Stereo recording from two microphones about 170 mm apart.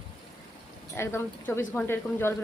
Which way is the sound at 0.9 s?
15° left (ahead or behind).